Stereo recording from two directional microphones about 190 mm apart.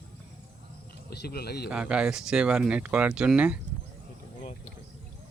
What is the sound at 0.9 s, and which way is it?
Speech, 55° left (ahead or behind).